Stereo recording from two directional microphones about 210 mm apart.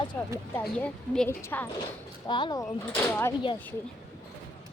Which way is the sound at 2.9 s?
10° left (ahead or behind).